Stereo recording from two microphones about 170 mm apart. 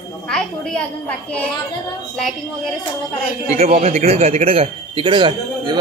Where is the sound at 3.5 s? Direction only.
40° right (ahead or behind).